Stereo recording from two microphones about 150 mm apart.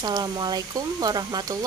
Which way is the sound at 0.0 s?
25° right (ahead or behind).